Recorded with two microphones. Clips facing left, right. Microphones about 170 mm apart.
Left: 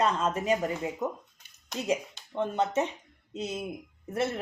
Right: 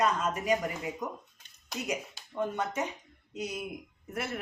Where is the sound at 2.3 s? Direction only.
25° left (ahead or behind).